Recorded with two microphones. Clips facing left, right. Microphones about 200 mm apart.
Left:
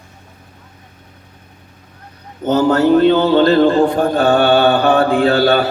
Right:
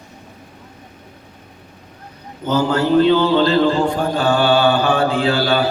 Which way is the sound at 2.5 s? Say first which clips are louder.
Left 5 dB; 65° left (ahead or behind).